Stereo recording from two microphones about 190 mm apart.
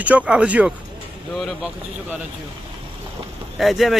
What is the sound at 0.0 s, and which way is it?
Speech, 10° right (ahead or behind).